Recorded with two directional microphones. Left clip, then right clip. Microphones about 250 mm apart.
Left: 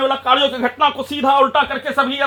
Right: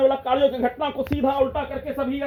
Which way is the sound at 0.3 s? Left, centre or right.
Centre.